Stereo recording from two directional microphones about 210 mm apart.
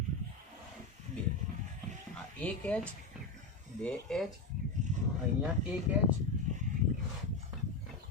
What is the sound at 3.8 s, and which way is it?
Speech, 5° left (ahead or behind).